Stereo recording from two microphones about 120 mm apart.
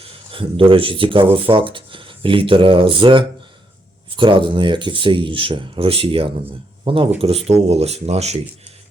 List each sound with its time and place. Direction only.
0.3 s speech: 50° right (ahead or behind); by 8.4 s 65° right (ahead or behind)